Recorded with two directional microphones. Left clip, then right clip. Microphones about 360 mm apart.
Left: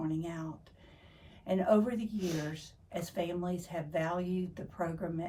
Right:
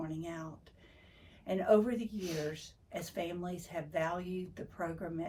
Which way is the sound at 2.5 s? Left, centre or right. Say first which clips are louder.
Right 2 dB; centre.